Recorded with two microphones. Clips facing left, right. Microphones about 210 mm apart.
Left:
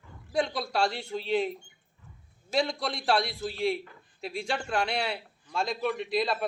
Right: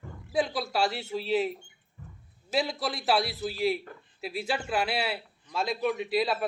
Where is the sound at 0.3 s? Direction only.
5° right (ahead or behind).